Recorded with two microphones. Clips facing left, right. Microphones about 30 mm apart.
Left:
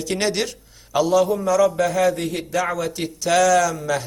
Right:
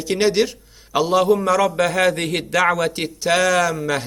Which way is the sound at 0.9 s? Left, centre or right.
Right.